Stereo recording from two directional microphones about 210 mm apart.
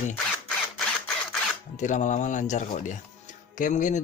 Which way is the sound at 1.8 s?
35° left (ahead or behind).